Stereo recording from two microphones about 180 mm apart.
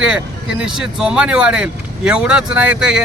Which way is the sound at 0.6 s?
5° right (ahead or behind).